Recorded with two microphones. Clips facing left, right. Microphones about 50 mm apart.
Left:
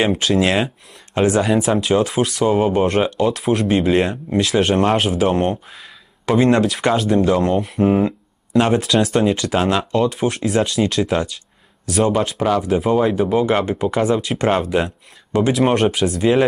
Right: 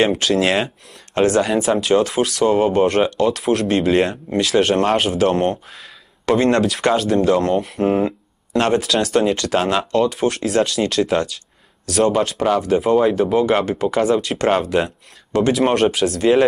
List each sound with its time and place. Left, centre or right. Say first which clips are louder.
0.0 s speech: even; centre
11.8 s speech: right 1 dB; centre
12.1 s speech: even; centre